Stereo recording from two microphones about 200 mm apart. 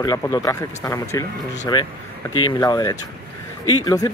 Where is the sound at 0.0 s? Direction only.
20° left (ahead or behind).